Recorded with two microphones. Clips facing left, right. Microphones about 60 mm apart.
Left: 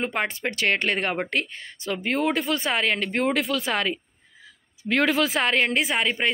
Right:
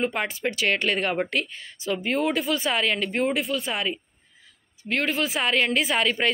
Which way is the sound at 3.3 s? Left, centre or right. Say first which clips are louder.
Left 2 dB; left.